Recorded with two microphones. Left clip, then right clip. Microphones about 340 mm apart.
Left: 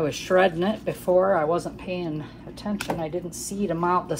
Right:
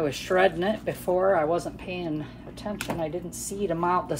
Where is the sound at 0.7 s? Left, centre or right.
Left.